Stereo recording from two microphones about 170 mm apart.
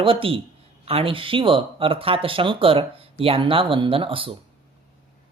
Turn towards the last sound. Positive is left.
turn(degrees=-30)  # may be behind; listen again after turning